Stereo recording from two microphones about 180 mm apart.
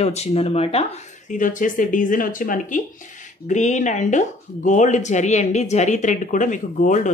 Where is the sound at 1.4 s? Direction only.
45° left (ahead or behind).